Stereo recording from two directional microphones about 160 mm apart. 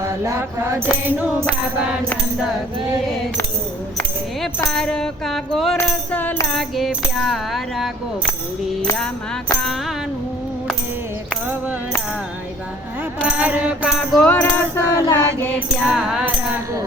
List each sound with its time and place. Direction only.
0.0 s music: 15° right (ahead or behind)
4.7 s tambourine: 5° left (ahead or behind)
5.7 s music: 10° left (ahead or behind)
6.7 s tambourine: centre (ahead or behind)
13.2 s music: 5° right (ahead or behind)
14.3 s music: 10° left (ahead or behind)
15.9 s tambourine: centre (ahead or behind)